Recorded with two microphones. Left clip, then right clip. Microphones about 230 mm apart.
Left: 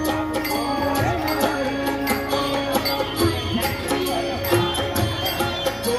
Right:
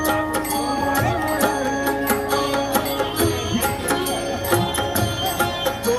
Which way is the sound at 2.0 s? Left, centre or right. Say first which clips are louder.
Right 2 dB; right.